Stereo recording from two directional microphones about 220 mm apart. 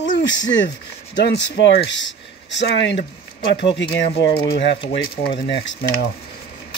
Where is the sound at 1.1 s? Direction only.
50° left (ahead or behind).